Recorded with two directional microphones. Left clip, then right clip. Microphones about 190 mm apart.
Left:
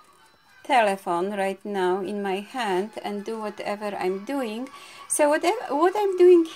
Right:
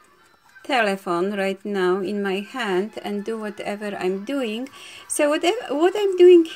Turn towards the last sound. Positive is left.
turn(degrees=-45)  # may be behind; listen again after turning